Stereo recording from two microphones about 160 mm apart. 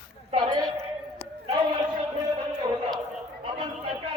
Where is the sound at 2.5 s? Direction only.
25° right (ahead or behind).